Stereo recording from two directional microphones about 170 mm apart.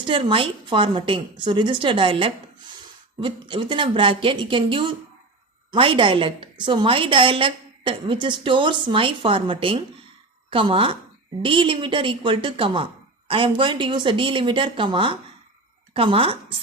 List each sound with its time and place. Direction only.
0.0 s a woman's voice: 30° right (ahead or behind)